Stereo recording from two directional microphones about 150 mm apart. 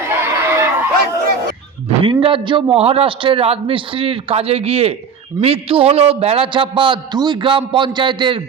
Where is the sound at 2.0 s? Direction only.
35° right (ahead or behind).